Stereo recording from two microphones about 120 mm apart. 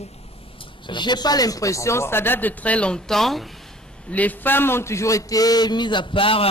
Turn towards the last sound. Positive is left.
turn(degrees=50)  # may be behind; listen again after turning